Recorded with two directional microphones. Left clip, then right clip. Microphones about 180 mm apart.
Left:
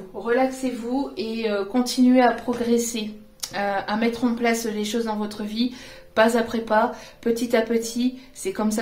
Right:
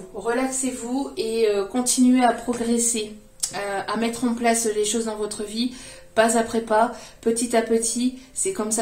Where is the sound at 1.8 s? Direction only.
40° left (ahead or behind).